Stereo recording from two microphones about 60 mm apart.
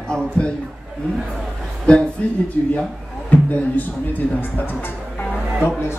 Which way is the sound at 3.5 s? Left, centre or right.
Left.